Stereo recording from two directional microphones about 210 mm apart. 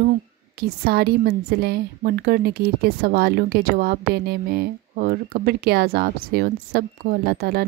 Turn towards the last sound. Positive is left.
turn(degrees=-50)  # may be behind; listen again after turning